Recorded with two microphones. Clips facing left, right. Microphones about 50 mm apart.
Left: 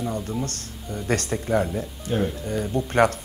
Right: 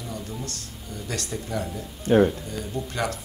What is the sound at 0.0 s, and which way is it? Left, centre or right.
Speech, left.